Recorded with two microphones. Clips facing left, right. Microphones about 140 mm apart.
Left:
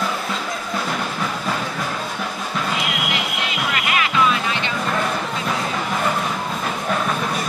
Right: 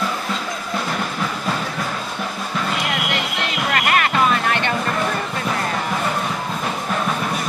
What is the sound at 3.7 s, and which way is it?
Music, 50° right (ahead or behind).